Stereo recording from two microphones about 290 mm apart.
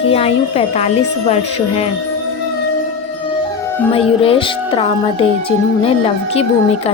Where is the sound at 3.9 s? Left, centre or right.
Centre.